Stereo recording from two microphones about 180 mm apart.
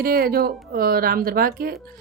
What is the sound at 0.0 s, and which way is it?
A woman's voice, 55° right (ahead or behind).